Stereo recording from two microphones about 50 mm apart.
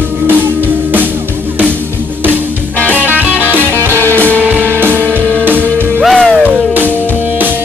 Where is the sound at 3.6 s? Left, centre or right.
Left.